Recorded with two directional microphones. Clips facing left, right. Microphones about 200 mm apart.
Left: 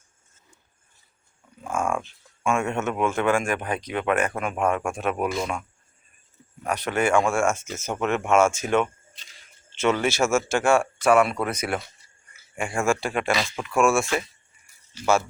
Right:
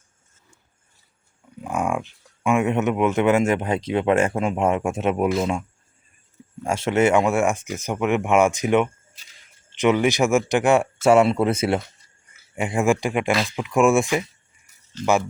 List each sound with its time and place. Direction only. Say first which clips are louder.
1.6 s speech: right 2 dB; 15° right (ahead or behind)
6.6 s speech: right 5 dB; 25° right (ahead or behind)
14.9 s speech: right 3 dB; 10° left (ahead or behind)